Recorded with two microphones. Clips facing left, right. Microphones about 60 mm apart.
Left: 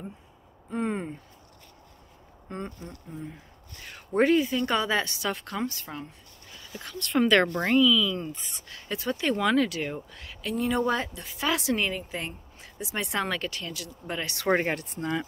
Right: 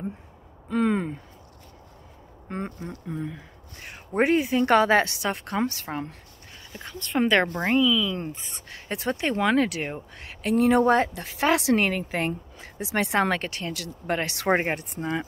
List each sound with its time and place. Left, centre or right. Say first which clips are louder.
0.7 s speech: right 6 dB; right
2.4 s speech: right 4 dB; right
3.1 s speech: right 7 dB; right
3.7 s speech: even; right
4.3 s speech: right 2 dB; right
4.6 s speech: right 7 dB; right
5.2 s speech: right 4 dB; right
6.8 s speech: even; right
11.9 s speech: right 5 dB; right
12.9 s speech: right 6 dB; right
13.7 s speech: right 6 dB; right
14.2 s speech: even; right